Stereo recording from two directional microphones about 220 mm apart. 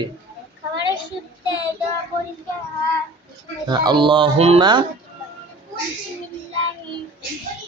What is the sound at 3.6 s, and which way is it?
A man's voice, 20° right (ahead or behind).